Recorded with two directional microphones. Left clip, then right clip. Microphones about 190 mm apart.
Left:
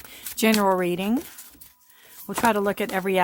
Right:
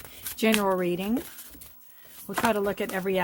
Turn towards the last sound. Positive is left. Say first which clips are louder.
# left 4 dB
turn(degrees=40)  # may be behind; listen again after turning